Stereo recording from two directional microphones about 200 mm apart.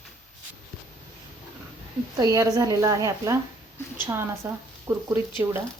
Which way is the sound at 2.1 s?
15° right (ahead or behind).